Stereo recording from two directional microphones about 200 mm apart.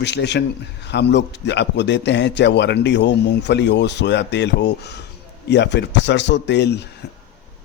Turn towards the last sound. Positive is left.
turn(degrees=55)  # may be behind; listen again after turning